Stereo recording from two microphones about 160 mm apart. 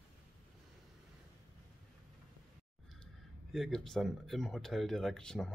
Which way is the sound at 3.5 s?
Centre (ahead or behind).